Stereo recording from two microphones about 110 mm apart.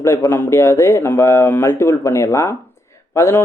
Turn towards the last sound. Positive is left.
turn(degrees=25)  # may be behind; listen again after turning